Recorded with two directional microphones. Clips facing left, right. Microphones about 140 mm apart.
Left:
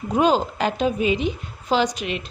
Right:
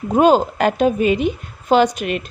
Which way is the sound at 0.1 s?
50° right (ahead or behind).